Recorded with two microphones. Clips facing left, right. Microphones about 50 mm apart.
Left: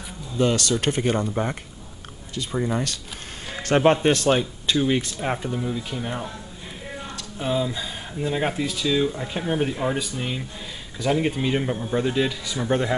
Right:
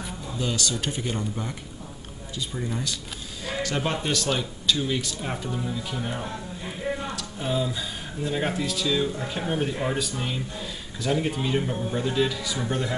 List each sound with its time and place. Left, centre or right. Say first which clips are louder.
0.4 s speech: left 7 dB; left
3.6 s speech: left 11 dB; left
5.5 s speech: left 3 dB; centre
12.3 s speech: left 1 dB; centre
12.6 s speech: left 7 dB; left